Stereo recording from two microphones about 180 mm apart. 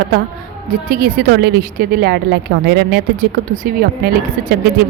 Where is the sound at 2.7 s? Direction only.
70° right (ahead or behind).